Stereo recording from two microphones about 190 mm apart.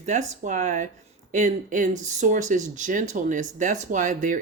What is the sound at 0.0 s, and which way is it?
Speech, 40° right (ahead or behind).